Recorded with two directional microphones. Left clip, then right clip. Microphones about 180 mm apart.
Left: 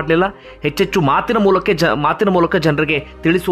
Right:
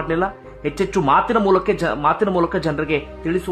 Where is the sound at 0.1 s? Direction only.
25° left (ahead or behind).